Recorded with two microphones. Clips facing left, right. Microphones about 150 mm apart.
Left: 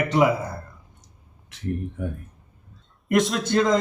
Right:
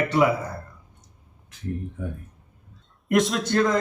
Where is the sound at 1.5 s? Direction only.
75° left (ahead or behind).